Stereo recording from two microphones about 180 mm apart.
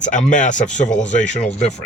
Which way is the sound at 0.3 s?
45° left (ahead or behind).